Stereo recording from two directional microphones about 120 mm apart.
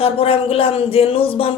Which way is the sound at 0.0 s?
50° left (ahead or behind).